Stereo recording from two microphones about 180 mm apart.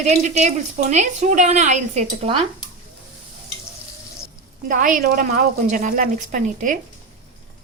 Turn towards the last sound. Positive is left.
turn(degrees=-45)  # may be behind; listen again after turning